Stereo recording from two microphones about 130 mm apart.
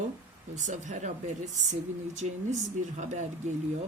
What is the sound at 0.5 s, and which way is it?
Speech, 70° right (ahead or behind).